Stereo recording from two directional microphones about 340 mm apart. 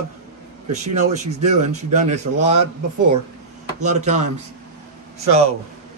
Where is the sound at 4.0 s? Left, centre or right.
Right.